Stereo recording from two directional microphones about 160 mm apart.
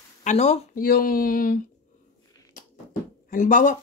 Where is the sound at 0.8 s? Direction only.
70° left (ahead or behind).